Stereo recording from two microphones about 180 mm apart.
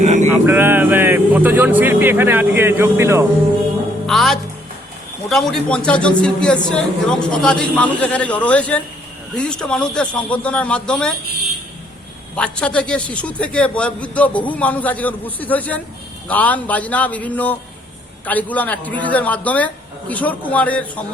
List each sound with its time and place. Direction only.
0.0 s a sound: 40° right (ahead or behind)
0.4 s speech: 10° right (ahead or behind)
4.0 s a man's voice: centre (ahead or behind)
12.4 s a man's voice: 5° left (ahead or behind)